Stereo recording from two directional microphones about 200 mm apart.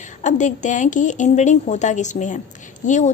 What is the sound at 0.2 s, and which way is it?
A woman's voice, 35° left (ahead or behind).